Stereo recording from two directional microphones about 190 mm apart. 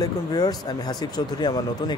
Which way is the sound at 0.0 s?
20° left (ahead or behind).